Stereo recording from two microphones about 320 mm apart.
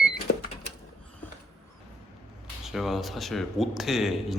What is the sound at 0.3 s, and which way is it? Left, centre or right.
Cash register, left.